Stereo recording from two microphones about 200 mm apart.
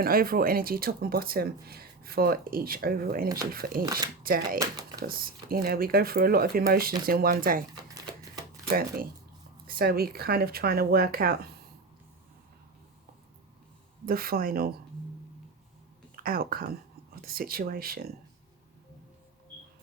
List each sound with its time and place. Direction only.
0.0 s speech: 45° right (ahead or behind)
9.6 s speech: 50° right (ahead or behind)
14.0 s speech: 45° right (ahead or behind)
16.1 s speech: 45° right (ahead or behind)